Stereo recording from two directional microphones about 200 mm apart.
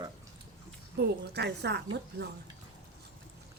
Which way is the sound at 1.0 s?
55° right (ahead or behind).